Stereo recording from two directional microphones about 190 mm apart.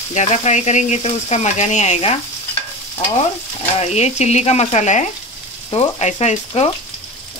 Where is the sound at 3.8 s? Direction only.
35° left (ahead or behind).